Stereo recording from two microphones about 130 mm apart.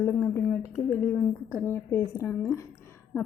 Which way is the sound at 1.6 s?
15° left (ahead or behind).